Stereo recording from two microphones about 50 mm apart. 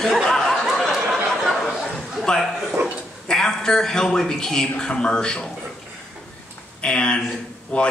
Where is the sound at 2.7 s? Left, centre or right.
Right.